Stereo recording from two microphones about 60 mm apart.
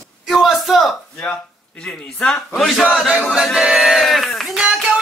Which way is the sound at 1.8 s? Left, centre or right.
Centre.